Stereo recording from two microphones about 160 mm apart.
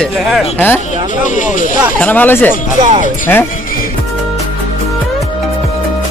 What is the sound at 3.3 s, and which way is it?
Speech, 10° left (ahead or behind).